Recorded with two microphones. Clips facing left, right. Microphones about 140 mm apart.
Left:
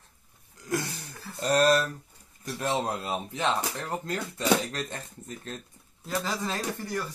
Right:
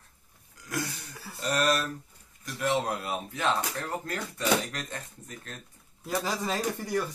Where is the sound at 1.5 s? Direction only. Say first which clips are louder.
Left 5 dB; 30° left (ahead or behind).